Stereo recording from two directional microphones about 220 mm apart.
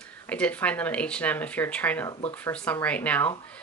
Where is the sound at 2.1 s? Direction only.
20° left (ahead or behind).